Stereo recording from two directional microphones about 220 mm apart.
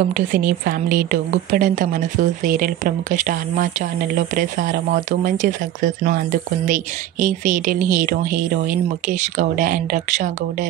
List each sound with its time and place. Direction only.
0.1 s speech: 40° right (ahead or behind)